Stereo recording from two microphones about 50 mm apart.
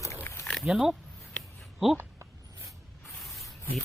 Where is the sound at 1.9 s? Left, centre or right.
Right.